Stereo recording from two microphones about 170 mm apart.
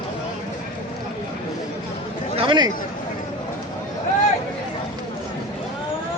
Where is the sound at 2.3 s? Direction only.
30° right (ahead or behind).